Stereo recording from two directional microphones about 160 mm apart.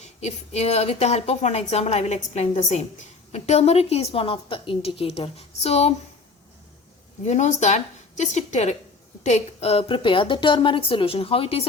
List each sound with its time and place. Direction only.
0.0 s a woman's voice: 45° left (ahead or behind)
7.3 s a woman's voice: 45° left (ahead or behind)